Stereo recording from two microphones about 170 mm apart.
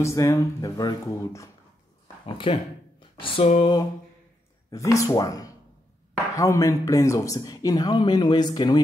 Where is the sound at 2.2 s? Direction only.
30° left (ahead or behind).